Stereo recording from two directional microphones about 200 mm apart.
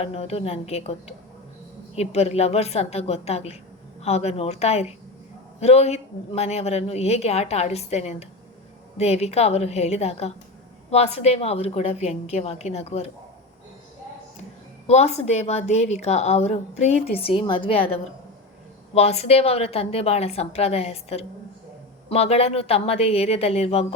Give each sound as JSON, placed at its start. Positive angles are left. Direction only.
{"t": 0.0, "sound": "a woman's voice", "side_deg": 30}
{"t": 14.8, "sound": "a woman's voice", "side_deg": 35}